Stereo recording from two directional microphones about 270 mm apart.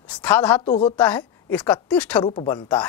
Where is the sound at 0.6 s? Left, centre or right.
Centre.